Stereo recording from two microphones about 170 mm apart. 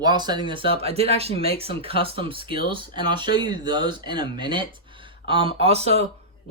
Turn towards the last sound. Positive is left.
turn(degrees=-35)  # may be behind; listen again after turning